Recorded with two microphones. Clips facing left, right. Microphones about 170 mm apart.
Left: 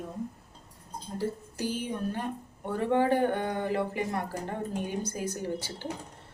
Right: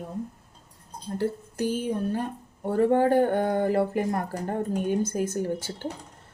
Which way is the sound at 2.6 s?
45° right (ahead or behind).